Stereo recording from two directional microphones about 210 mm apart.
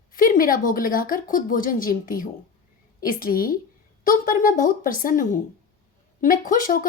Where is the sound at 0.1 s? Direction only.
40° left (ahead or behind).